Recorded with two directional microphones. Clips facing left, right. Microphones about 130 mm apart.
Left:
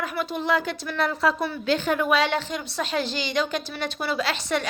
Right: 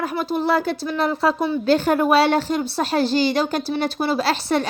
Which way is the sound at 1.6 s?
40° right (ahead or behind).